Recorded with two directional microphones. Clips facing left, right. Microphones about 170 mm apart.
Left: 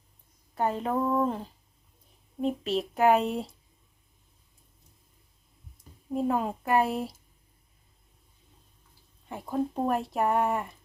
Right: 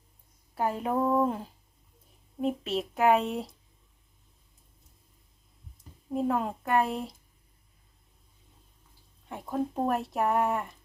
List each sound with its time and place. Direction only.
0.5 s speech: 5° right (ahead or behind)
2.4 s speech: centre (ahead or behind)
6.1 s speech: centre (ahead or behind)
9.3 s speech: centre (ahead or behind)